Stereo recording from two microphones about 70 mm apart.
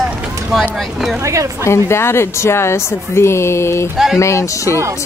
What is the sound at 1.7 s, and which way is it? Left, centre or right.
Speech, left.